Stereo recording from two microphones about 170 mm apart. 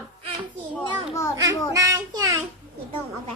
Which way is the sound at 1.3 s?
20° right (ahead or behind).